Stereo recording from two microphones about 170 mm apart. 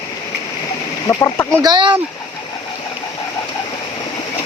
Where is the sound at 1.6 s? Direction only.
25° right (ahead or behind).